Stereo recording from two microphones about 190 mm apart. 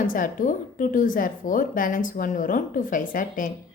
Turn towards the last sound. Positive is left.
turn(degrees=45)  # may be behind; listen again after turning